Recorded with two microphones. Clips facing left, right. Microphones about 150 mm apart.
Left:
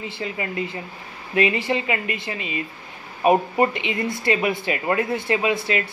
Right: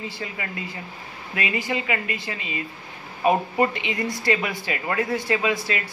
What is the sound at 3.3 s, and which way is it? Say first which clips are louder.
Speech: left 3 dB; 20° left (ahead or behind).